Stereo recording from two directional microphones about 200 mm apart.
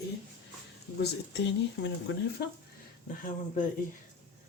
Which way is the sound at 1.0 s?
60° left (ahead or behind).